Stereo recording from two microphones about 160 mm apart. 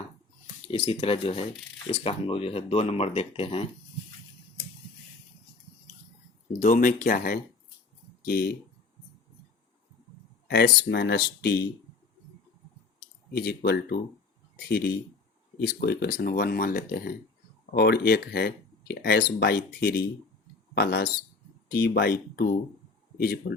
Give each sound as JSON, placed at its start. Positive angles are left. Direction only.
{"t": 0.7, "sound": "speech", "side_deg": 35}
{"t": 6.6, "sound": "speech", "side_deg": 55}
{"t": 8.2, "sound": "speech", "side_deg": 75}
{"t": 10.5, "sound": "speech", "side_deg": 90}
{"t": 13.3, "sound": "speech", "side_deg": 85}
{"t": 17.7, "sound": "speech", "side_deg": 85}